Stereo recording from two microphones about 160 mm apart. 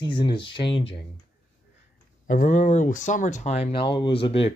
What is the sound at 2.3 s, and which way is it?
Speech, 55° left (ahead or behind).